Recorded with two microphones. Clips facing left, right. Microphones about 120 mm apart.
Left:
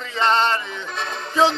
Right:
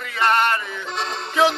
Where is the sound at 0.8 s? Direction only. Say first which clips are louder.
Right 1 dB; 15° right (ahead or behind).